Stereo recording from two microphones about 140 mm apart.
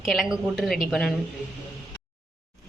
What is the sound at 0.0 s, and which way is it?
A woman's voice, centre (ahead or behind).